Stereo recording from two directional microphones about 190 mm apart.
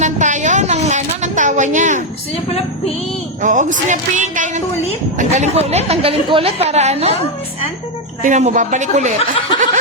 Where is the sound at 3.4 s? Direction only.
40° right (ahead or behind).